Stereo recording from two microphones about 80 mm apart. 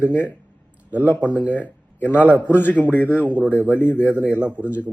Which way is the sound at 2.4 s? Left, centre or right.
Left.